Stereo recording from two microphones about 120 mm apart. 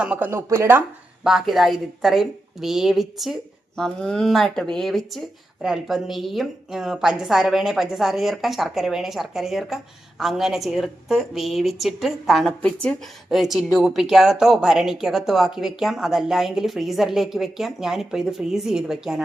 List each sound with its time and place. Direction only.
0.0 s speech: 10° right (ahead or behind)
0.3 s speech: 20° right (ahead or behind)
1.2 s a woman's voice: 5° right (ahead or behind)